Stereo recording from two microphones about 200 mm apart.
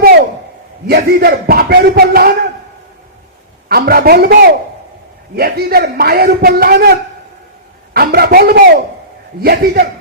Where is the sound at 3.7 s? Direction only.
50° right (ahead or behind).